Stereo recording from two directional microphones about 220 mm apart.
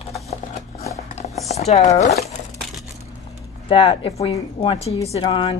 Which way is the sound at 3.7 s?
25° left (ahead or behind).